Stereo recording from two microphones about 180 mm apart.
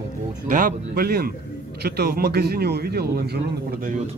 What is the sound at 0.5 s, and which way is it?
Speech, 55° right (ahead or behind).